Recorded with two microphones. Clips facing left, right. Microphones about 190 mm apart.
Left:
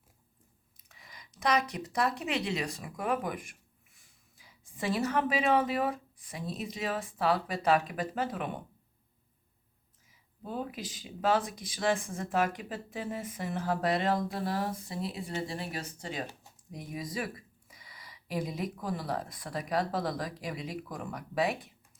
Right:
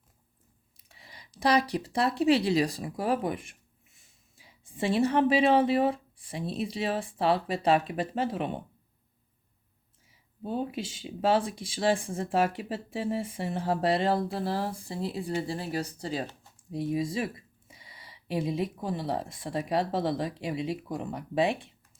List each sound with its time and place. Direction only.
0.9 s speech: 30° right (ahead or behind)
10.4 s speech: 30° right (ahead or behind)